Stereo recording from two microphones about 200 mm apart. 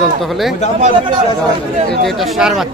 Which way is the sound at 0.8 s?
25° right (ahead or behind).